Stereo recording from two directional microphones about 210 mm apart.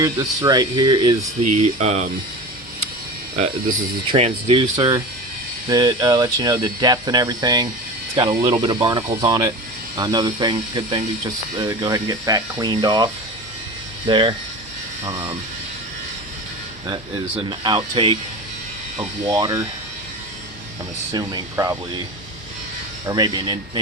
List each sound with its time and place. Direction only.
0.0 s speech: 20° right (ahead or behind)
1.5 s speech: 30° right (ahead or behind)
3.3 s speech: 35° right (ahead or behind)
4.1 s speech: 25° right (ahead or behind)
14.1 s speech: 25° right (ahead or behind)
16.9 s speech: 20° right (ahead or behind)
19.2 s speech: 15° right (ahead or behind)
21.1 s speech: 20° right (ahead or behind)
23.0 s speech: 20° right (ahead or behind)